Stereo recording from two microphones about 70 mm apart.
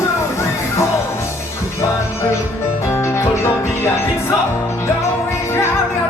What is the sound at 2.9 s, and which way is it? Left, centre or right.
Music, left.